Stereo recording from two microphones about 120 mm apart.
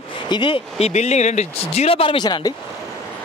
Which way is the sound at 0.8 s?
65° left (ahead or behind).